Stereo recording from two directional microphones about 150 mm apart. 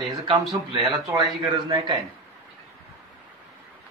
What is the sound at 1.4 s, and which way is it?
Speech, 25° right (ahead or behind).